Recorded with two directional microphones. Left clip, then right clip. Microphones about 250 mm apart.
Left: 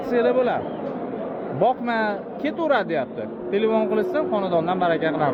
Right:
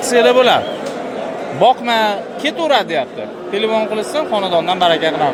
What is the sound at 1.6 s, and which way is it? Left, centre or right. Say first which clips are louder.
A man's voice: right 9 dB; centre.